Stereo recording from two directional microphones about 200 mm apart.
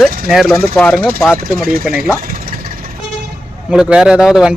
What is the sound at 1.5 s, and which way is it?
Speech, 45° right (ahead or behind).